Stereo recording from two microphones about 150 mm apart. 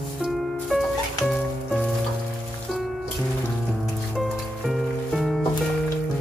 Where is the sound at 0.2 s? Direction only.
Centre (ahead or behind).